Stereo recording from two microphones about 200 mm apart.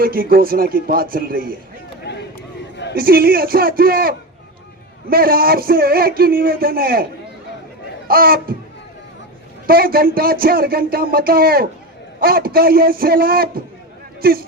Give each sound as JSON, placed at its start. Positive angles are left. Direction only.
{"t": 0.0, "sound": "a man's voice", "side_deg": -45}
{"t": 2.1, "sound": "a sound", "side_deg": 60}
{"t": 2.9, "sound": "a man's voice", "side_deg": -45}
{"t": 9.6, "sound": "a man's voice", "side_deg": -45}